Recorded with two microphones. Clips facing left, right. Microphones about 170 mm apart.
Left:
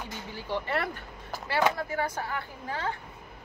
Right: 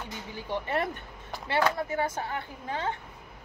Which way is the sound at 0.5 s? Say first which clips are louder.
Right 1 dB; 20° right (ahead or behind).